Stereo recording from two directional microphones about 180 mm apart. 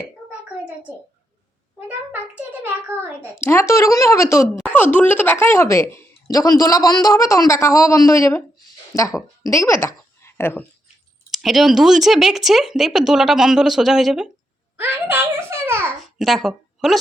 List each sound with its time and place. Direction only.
1.9 s a child's voice: 10° right (ahead or behind)
3.4 s a woman's voice: 15° left (ahead or behind)
11.3 s speech: centre (ahead or behind)
14.8 s a sound: 10° right (ahead or behind)
16.1 s speech: centre (ahead or behind)